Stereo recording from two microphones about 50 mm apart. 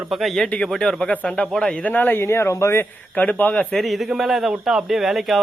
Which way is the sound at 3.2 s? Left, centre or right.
Left.